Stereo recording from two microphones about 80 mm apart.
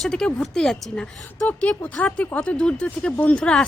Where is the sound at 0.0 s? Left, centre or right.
Centre.